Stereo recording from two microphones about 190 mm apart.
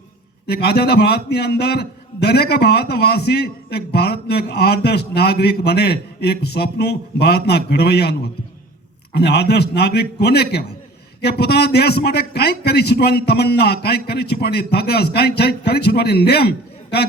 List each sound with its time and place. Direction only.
0.4 s a man's voice: 55° left (ahead or behind)
9.1 s a man's voice: 60° left (ahead or behind)